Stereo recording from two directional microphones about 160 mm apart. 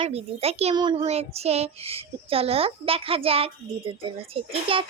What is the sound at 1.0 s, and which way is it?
A child's voice, 40° right (ahead or behind).